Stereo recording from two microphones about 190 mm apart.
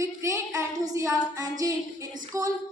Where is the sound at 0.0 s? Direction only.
15° right (ahead or behind).